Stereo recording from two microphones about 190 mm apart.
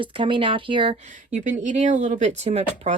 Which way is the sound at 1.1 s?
40° right (ahead or behind).